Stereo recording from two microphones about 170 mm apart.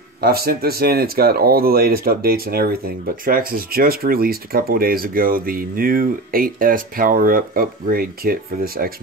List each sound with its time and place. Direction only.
0.2 s speech: 65° right (ahead or behind)